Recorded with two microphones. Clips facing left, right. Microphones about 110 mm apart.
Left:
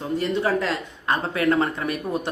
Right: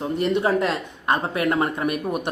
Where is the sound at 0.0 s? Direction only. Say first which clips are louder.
Right 2 dB; 20° right (ahead or behind).